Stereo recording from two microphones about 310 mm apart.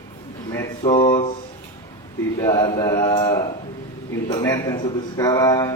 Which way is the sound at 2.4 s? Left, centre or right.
Centre.